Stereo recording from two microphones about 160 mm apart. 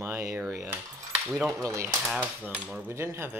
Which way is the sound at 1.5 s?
20° right (ahead or behind).